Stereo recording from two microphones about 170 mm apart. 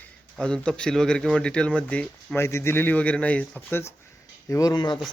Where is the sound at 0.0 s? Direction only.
5° left (ahead or behind).